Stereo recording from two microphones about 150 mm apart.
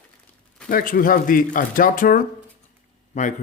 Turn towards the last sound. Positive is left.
turn(degrees=55)  # may be behind; listen again after turning